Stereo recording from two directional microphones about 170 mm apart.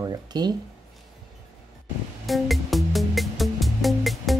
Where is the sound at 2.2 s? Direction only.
Centre (ahead or behind).